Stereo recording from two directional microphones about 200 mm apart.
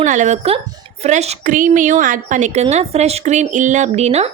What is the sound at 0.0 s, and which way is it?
A woman's voice, 35° right (ahead or behind).